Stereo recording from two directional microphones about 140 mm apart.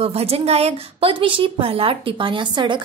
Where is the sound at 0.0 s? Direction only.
45° right (ahead or behind).